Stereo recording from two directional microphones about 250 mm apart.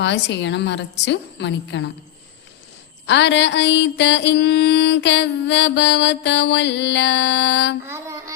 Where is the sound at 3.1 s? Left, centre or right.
Left.